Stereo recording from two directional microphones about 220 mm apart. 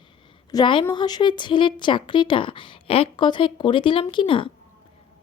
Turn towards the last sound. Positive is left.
turn(degrees=25)  # may be behind; listen again after turning